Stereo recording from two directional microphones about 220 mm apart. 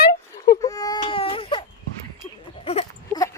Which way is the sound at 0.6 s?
15° left (ahead or behind).